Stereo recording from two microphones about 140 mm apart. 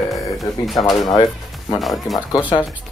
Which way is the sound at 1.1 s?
25° left (ahead or behind).